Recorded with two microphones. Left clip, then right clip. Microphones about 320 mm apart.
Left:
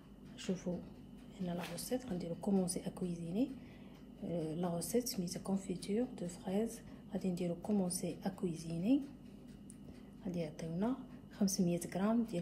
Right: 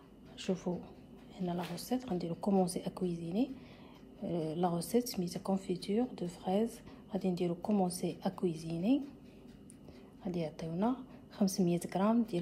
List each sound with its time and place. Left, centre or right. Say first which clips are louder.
0.5 s speech: right 5 dB; right
1.9 s a woman's voice: right 3 dB; right
10.2 s a woman's voice: right 4 dB; right